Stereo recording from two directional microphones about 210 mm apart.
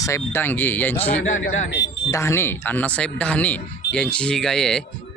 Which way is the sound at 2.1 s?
10° left (ahead or behind).